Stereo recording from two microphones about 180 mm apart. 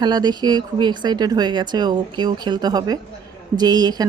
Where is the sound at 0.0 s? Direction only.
25° right (ahead or behind).